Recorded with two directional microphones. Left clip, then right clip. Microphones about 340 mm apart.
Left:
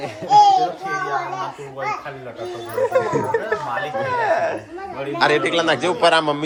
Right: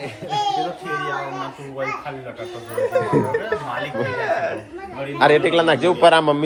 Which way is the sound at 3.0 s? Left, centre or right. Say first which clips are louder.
Right 3 dB; centre.